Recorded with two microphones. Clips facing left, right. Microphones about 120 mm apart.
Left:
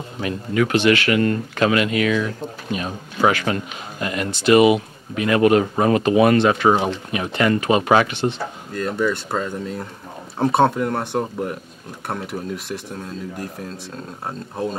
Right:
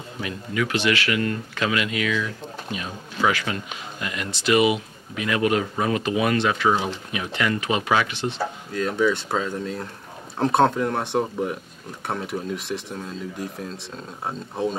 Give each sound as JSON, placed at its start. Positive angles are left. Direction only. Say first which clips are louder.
{"t": 0.2, "sound": "speech", "louder": "left 6 dB", "side_deg": 45}
{"t": 8.7, "sound": "speech", "louder": "even", "side_deg": 0}